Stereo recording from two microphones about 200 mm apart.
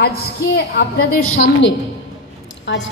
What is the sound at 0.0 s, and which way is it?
A woman's voice, 50° left (ahead or behind).